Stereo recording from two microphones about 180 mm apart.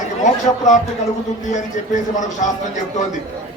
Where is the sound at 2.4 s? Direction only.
45° left (ahead or behind).